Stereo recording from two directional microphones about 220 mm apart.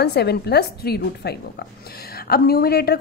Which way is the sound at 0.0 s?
50° left (ahead or behind).